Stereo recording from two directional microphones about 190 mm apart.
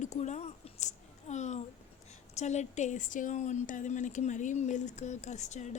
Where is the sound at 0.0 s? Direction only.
40° left (ahead or behind).